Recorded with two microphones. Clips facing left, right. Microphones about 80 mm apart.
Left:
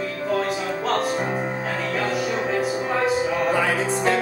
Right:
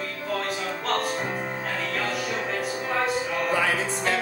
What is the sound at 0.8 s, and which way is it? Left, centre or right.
Music, centre.